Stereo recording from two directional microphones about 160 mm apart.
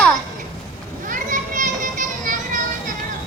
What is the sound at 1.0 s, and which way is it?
Children playing, 55° right (ahead or behind).